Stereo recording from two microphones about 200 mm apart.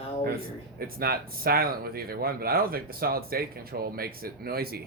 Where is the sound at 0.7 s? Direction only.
50° right (ahead or behind).